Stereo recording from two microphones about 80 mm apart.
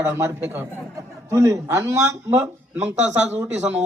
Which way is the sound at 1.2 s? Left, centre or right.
Right.